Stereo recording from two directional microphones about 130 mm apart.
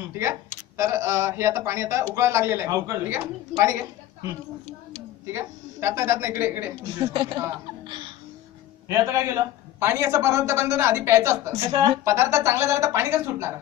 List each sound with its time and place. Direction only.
0.7 s a man's voice: 20° right (ahead or behind)
5.2 s a man's voice: 20° right (ahead or behind)
7.1 s speech: 40° right (ahead or behind)
8.8 s a man's voice: 20° right (ahead or behind)